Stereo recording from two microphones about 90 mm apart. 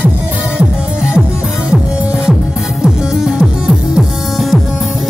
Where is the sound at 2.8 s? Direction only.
10° right (ahead or behind).